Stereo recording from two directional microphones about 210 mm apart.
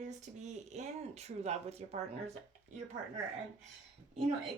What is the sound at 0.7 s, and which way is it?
Speech, 30° right (ahead or behind).